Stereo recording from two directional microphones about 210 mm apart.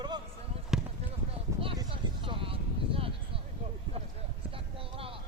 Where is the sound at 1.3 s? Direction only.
25° right (ahead or behind).